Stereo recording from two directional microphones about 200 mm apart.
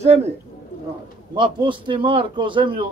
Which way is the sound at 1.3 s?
25° right (ahead or behind).